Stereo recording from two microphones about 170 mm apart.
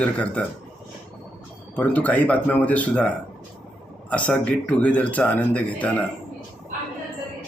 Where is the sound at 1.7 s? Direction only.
10° left (ahead or behind).